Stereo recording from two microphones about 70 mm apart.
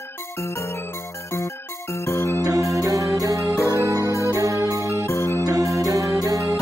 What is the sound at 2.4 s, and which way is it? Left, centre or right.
Music, right.